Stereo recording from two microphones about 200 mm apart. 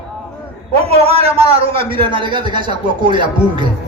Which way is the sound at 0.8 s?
30° right (ahead or behind).